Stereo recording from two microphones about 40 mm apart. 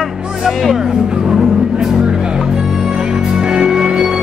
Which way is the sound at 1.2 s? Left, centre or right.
Centre.